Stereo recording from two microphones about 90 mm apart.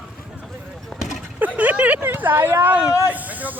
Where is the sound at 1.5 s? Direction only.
15° right (ahead or behind).